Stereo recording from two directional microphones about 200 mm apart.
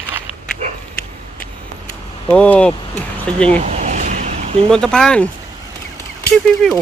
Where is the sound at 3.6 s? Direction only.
35° right (ahead or behind).